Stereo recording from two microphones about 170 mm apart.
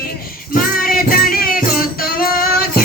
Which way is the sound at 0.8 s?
55° left (ahead or behind).